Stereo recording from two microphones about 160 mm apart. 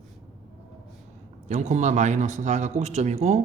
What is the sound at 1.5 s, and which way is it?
A man's voice, 45° right (ahead or behind).